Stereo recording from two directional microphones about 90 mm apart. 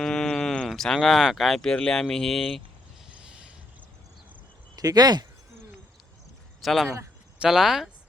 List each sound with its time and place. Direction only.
0.0 s speech: 5° left (ahead or behind)
3.2 s a sound: 10° right (ahead or behind)
4.8 s speech: 45° right (ahead or behind)
6.6 s speech: centre (ahead or behind)